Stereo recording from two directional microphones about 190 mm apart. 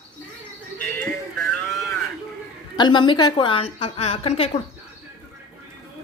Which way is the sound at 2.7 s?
25° left (ahead or behind).